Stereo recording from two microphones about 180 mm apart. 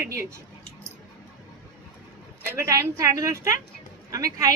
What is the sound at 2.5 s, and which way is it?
A woman's voice, 15° right (ahead or behind).